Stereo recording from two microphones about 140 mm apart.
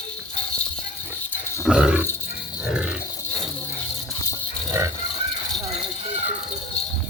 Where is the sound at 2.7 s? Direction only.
5° right (ahead or behind).